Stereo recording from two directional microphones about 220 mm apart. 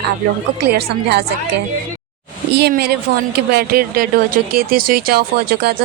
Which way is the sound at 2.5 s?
50° right (ahead or behind).